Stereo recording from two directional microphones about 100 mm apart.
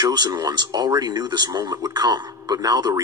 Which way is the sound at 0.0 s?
40° right (ahead or behind).